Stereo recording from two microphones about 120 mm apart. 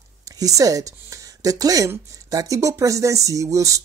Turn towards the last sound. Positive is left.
turn(degrees=-25)  # may be behind; listen again after turning